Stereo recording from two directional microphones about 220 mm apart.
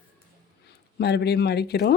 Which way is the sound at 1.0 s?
50° left (ahead or behind).